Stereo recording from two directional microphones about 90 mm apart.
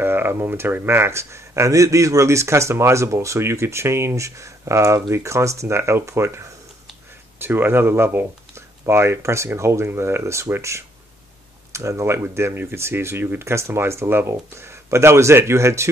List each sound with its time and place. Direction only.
0.0 s speech: 25° right (ahead or behind)